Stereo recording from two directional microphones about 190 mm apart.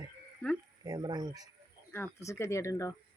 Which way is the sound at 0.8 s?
20° right (ahead or behind).